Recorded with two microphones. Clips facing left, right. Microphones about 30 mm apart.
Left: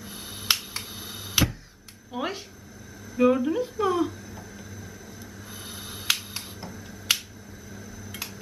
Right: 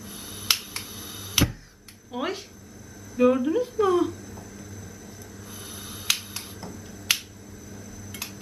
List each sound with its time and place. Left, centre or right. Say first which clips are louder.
0.0 s finger snapping: left 1 dB; centre
0.5 s finger snapping: even; centre
0.9 s finger snapping: even; centre
2.1 s speech: right 1 dB; centre
5.5 s a sound: left 1 dB; centre